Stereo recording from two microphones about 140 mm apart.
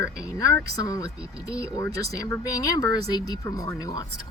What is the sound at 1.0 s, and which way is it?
Speech, 5° right (ahead or behind).